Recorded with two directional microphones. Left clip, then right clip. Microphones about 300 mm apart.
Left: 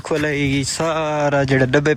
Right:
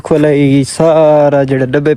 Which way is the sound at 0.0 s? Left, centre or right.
Centre.